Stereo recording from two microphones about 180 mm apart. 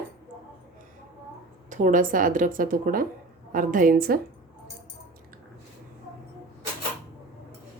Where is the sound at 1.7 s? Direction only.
45° right (ahead or behind).